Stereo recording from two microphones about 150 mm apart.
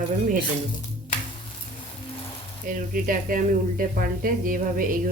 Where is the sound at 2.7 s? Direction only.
65° right (ahead or behind).